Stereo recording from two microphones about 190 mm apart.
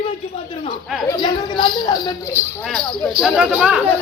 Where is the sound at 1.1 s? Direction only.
25° left (ahead or behind).